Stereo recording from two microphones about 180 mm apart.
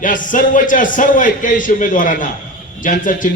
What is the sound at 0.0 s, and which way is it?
A man's voice, 50° left (ahead or behind).